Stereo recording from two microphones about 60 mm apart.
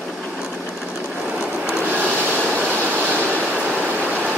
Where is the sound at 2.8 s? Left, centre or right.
Right.